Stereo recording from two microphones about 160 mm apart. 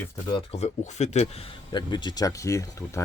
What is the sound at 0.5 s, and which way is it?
Speech, 45° left (ahead or behind).